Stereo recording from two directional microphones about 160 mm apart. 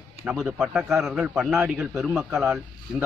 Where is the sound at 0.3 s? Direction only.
5° right (ahead or behind).